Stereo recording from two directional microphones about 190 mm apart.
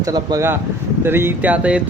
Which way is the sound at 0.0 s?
20° right (ahead or behind).